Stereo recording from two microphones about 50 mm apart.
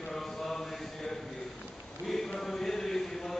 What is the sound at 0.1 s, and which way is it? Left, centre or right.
Mantra, centre.